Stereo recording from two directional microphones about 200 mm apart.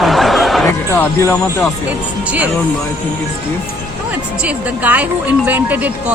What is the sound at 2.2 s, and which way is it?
Speech, 5° right (ahead or behind).